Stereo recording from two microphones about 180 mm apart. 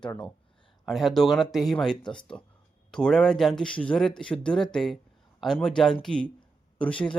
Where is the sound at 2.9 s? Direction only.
5° left (ahead or behind).